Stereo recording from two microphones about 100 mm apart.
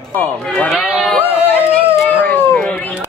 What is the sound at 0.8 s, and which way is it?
Speech, centre (ahead or behind).